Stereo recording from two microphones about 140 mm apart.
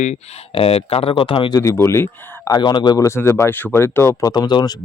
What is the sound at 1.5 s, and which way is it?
Speech, 20° left (ahead or behind).